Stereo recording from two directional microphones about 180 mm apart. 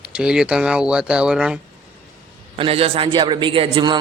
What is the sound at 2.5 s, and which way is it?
A man's voice, 30° right (ahead or behind).